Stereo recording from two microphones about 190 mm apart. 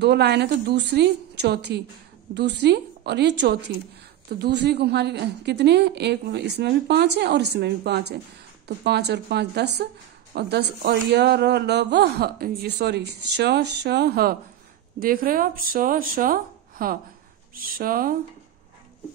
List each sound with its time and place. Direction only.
0.0 s speech: 60° right (ahead or behind)